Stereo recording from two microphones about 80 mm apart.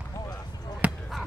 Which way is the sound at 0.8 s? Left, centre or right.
Right.